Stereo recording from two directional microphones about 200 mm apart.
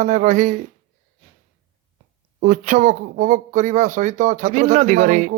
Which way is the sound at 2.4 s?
40° right (ahead or behind).